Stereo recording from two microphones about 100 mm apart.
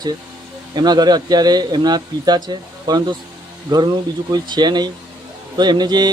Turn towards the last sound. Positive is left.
turn(degrees=-45)  # may be behind; listen again after turning